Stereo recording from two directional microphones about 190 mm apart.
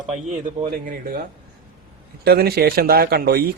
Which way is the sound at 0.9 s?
50° right (ahead or behind).